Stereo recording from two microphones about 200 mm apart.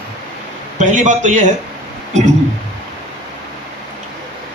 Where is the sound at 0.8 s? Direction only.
35° right (ahead or behind).